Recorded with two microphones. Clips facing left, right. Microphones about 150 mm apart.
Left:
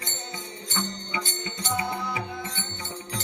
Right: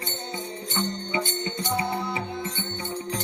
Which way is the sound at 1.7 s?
30° right (ahead or behind).